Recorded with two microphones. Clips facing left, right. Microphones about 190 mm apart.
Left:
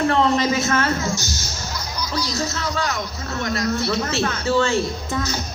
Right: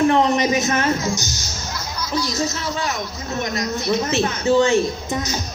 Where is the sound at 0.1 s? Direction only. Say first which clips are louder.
Right 2 dB; 20° right (ahead or behind).